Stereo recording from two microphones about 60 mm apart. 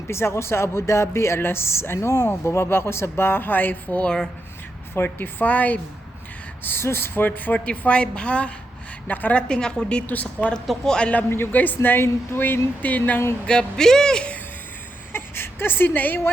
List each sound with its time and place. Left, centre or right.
0.1 s speech: left
4.0 s speech: centre
4.9 s speech: left
6.6 s a woman's voice: left
9.5 s speech: centre
10.1 s a woman's voice: left
10.8 s speech: centre
11.5 s speech: left
13.4 s speech: centre
15.1 s a sound: left